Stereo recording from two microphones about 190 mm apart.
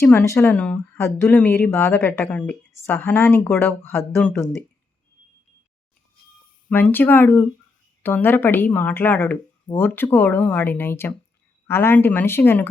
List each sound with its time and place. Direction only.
0.0 s speech: 10° left (ahead or behind)
6.7 s speech: 10° left (ahead or behind)